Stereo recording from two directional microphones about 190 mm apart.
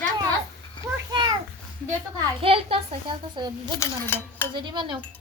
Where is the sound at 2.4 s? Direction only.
30° right (ahead or behind).